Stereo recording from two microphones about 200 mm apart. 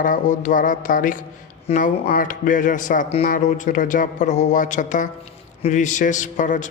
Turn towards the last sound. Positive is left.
turn(degrees=40)  # may be behind; listen again after turning